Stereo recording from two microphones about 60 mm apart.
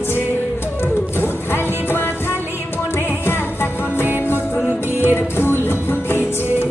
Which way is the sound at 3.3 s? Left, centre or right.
Left.